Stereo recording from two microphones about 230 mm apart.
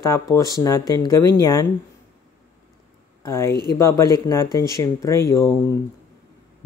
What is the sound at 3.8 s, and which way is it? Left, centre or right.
Speech, centre.